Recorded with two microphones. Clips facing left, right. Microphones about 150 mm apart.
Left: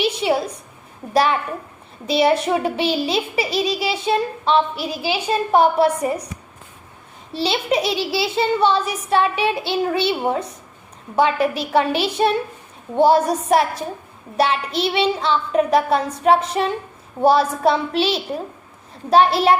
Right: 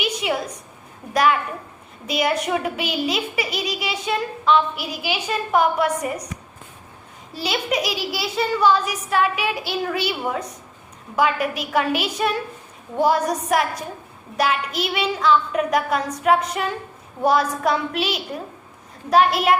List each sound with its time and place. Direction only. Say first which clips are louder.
0.0 s a sound: left 5 dB; 30° left (ahead or behind)
1.1 s a child's voice: left 1 dB; 30° left (ahead or behind)
7.3 s a child's voice: left 4 dB; 30° left (ahead or behind)